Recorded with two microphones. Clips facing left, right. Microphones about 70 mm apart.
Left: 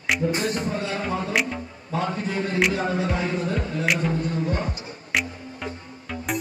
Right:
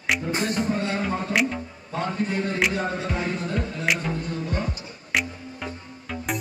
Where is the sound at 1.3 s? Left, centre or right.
Centre.